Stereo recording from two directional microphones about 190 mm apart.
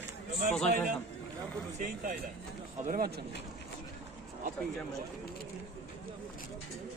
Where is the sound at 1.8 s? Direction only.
45° right (ahead or behind).